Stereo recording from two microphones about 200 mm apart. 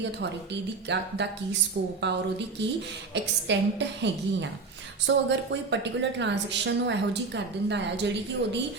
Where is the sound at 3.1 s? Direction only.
60° right (ahead or behind).